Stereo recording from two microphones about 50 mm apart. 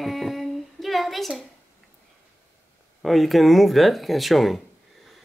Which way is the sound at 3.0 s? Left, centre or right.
Centre.